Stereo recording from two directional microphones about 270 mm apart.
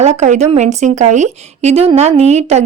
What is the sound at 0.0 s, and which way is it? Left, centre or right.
Speech, right.